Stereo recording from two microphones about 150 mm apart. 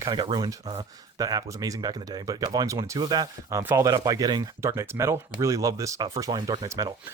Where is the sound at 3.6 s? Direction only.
15° right (ahead or behind).